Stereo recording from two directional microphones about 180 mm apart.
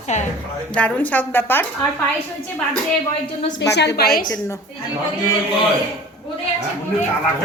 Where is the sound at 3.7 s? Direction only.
70° left (ahead or behind).